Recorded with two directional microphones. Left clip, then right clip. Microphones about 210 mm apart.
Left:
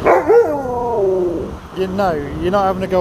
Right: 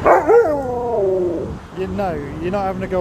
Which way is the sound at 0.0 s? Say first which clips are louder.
Left 1 dB; centre (ahead or behind).